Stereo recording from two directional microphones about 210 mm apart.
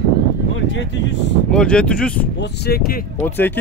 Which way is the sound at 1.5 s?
5° left (ahead or behind).